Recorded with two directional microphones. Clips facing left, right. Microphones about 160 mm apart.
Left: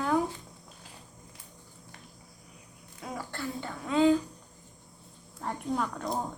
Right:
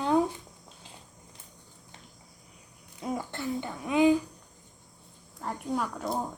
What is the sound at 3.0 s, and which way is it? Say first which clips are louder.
Speech: right 4 dB; 20° right (ahead or behind).